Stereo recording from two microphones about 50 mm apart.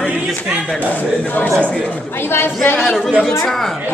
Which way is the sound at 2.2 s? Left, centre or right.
Left.